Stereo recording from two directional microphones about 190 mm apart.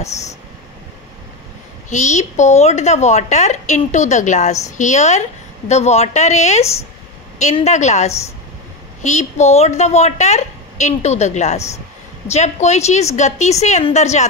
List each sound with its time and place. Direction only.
1.9 s a woman's voice: 40° left (ahead or behind)